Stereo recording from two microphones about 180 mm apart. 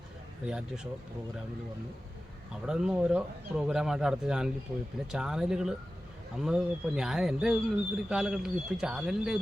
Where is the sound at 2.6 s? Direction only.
5° right (ahead or behind).